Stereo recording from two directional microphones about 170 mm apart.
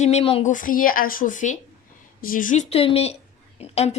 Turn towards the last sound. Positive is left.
turn(degrees=40)  # may be behind; listen again after turning